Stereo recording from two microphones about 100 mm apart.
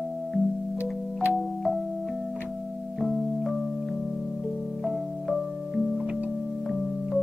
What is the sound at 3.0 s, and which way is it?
Music, centre (ahead or behind).